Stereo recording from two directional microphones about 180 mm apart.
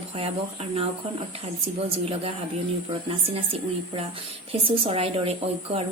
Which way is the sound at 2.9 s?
30° right (ahead or behind).